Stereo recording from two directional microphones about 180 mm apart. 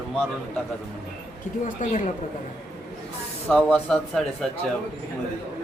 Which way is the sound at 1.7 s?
45° left (ahead or behind).